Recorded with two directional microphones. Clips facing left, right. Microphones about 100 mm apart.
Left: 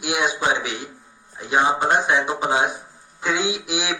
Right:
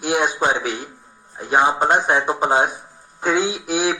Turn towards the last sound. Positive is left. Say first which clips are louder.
# right 4 dB
turn(degrees=-45)  # may be behind; listen again after turning